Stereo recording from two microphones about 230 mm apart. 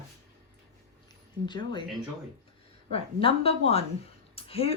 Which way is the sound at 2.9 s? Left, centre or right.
Left.